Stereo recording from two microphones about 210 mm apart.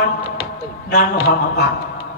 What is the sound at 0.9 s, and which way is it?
Speech, 45° left (ahead or behind).